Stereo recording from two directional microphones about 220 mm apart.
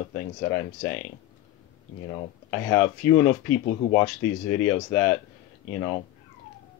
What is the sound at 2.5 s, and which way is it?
Speech, 10° left (ahead or behind).